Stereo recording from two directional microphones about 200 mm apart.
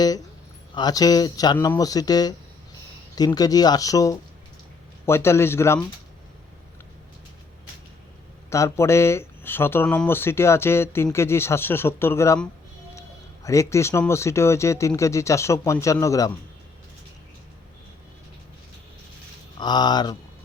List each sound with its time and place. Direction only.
0.7 s speech: 20° left (ahead or behind)
8.4 s speech: 15° left (ahead or behind)
19.5 s speech: 20° left (ahead or behind)